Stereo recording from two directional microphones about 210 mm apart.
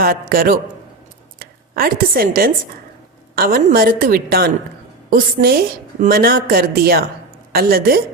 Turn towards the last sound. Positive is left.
turn(degrees=-45)  # may be behind; listen again after turning